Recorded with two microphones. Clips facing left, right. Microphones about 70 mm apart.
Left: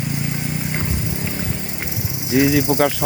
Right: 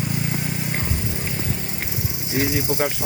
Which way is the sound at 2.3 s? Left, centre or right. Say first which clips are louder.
Left 8 dB; left.